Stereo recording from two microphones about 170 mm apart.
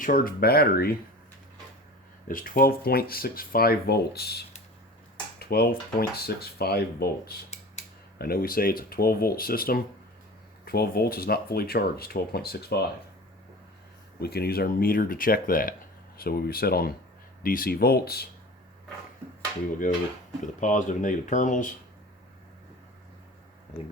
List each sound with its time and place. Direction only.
0.0 s speech: 55° left (ahead or behind)
2.2 s speech: 55° left (ahead or behind)
5.4 s dishes: 65° left (ahead or behind)
6.0 s speech: 65° left (ahead or behind)
14.2 s speech: 65° left (ahead or behind)
20.6 s speech: 50° left (ahead or behind)